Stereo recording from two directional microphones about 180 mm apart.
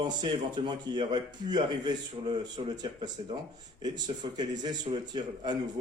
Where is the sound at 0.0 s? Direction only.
25° right (ahead or behind).